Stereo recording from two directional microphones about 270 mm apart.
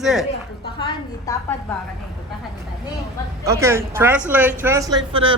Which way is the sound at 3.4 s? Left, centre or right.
Centre.